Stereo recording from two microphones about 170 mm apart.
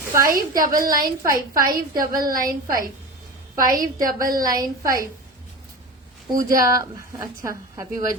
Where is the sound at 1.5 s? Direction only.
20° right (ahead or behind).